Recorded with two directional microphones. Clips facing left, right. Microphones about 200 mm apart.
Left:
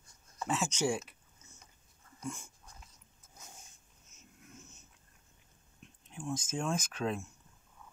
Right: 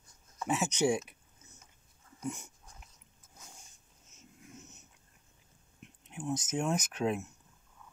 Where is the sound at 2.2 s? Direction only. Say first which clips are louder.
Right 3 dB; 20° right (ahead or behind).